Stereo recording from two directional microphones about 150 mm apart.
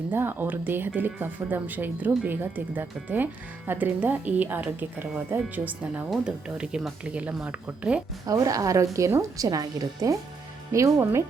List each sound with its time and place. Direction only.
0.1 s speech: 15° right (ahead or behind)
8.3 s speech: 20° right (ahead or behind)